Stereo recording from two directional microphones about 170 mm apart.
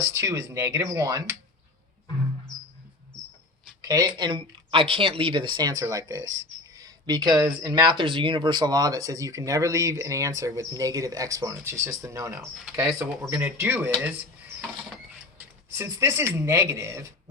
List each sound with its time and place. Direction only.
0.1 s speech: 15° right (ahead or behind)
3.8 s speech: 20° right (ahead or behind)
15.4 s speech: 15° right (ahead or behind)